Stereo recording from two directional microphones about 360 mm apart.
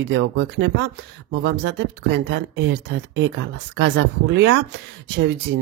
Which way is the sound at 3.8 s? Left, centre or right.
Right.